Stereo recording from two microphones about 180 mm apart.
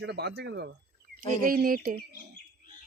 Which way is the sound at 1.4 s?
50° right (ahead or behind).